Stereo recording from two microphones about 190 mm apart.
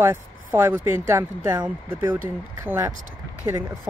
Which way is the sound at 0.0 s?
10° right (ahead or behind).